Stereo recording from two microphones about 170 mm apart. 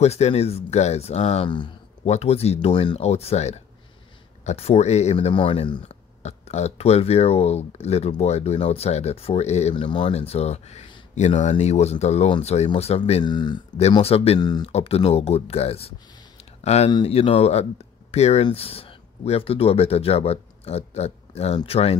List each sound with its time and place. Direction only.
0.0 s speech: 40° left (ahead or behind)
13.2 s speech: 25° left (ahead or behind)
13.9 s speech: 35° left (ahead or behind)
14.4 s speech: 25° left (ahead or behind)
14.7 s speech: 35° left (ahead or behind)